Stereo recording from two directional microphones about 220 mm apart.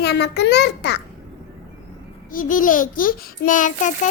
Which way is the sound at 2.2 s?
40° left (ahead or behind).